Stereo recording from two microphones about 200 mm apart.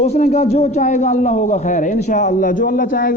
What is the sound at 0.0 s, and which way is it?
A man's voice, 35° left (ahead or behind).